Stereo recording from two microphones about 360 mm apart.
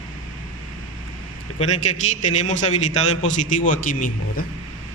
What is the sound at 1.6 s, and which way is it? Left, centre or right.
A man's voice, centre.